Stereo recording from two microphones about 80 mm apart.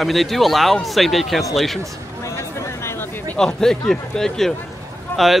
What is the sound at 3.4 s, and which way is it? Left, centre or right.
A man's voice, centre.